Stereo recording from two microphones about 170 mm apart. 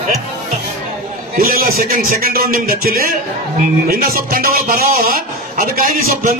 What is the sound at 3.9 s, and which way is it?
Speech, 60° right (ahead or behind).